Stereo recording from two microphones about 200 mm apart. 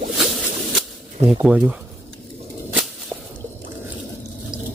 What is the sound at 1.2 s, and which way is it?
Speech, 5° right (ahead or behind).